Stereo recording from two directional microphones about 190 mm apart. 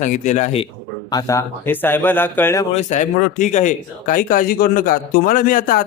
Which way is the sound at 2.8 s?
40° left (ahead or behind).